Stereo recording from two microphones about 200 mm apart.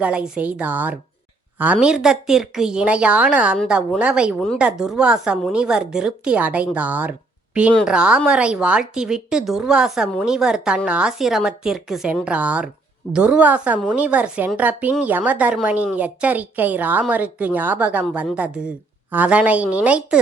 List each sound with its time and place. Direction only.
0.0 s a woman's voice: 5° right (ahead or behind)
7.7 s a woman's voice: 5° left (ahead or behind)
7.9 s a woman's voice: 5° right (ahead or behind)